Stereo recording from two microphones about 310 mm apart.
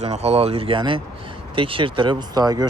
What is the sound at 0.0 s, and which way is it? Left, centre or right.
Speech, right.